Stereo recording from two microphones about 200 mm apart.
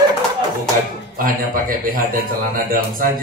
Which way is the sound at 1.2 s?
45° right (ahead or behind).